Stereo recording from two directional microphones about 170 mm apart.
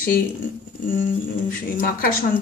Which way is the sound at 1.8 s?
65° left (ahead or behind).